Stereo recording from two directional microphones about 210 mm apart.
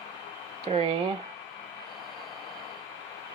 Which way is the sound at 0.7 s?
30° right (ahead or behind).